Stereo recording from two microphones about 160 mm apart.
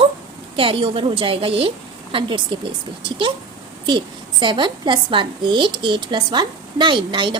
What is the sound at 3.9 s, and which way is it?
A woman's voice, 30° right (ahead or behind).